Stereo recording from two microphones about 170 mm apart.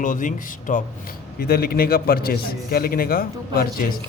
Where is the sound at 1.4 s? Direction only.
65° left (ahead or behind).